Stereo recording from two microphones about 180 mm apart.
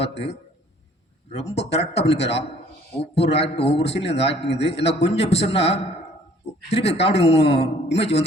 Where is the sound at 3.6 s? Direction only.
75° left (ahead or behind).